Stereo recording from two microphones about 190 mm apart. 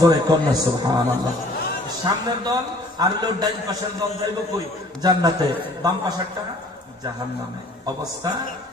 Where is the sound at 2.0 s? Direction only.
20° right (ahead or behind).